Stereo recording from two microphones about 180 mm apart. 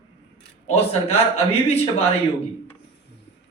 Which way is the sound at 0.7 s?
35° left (ahead or behind).